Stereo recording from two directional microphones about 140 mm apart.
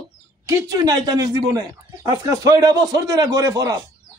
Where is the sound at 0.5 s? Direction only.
25° right (ahead or behind).